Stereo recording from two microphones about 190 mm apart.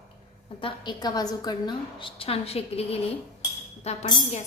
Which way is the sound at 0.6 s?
25° left (ahead or behind).